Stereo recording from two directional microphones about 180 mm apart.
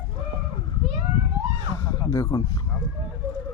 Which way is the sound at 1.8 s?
20° left (ahead or behind).